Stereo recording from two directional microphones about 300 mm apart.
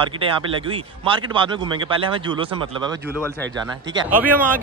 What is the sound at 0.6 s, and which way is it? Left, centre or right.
Speech, centre.